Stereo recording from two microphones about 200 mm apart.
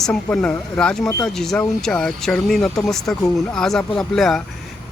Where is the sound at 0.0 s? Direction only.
5° left (ahead or behind).